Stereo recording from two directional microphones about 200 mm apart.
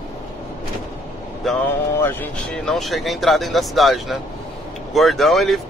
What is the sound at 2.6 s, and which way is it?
Speech, centre (ahead or behind).